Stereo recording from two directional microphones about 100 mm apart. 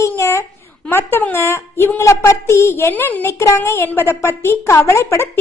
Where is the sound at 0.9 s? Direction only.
20° left (ahead or behind).